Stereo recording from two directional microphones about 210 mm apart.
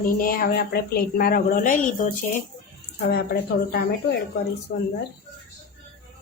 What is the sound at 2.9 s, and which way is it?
A woman's voice, 50° left (ahead or behind).